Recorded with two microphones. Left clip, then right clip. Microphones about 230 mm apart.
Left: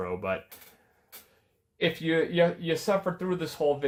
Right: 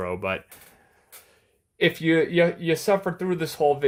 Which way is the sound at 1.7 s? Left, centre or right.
Right.